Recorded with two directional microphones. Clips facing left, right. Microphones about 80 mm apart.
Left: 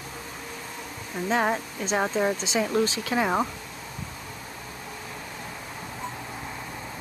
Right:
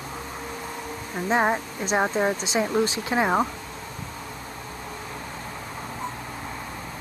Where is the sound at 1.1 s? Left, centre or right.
Right.